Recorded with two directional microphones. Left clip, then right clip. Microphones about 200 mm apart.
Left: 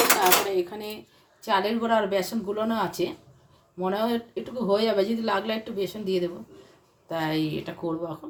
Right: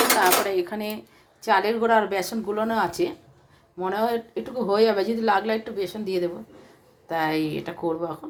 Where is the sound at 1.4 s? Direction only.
20° right (ahead or behind).